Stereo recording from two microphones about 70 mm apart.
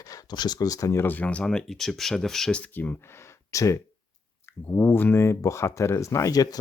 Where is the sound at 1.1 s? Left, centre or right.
Centre.